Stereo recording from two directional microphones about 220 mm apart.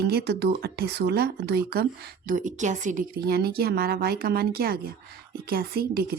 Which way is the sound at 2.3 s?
35° right (ahead or behind).